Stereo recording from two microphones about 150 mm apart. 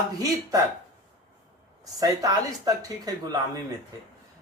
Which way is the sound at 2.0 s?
25° right (ahead or behind).